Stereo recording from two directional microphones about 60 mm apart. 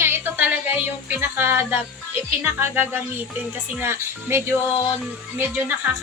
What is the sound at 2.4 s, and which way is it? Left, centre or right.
Speech, right.